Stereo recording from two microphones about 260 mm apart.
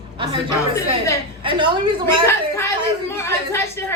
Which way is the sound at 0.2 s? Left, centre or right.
Centre.